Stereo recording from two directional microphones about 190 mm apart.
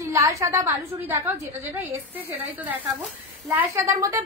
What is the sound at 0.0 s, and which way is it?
A woman's voice, 15° right (ahead or behind).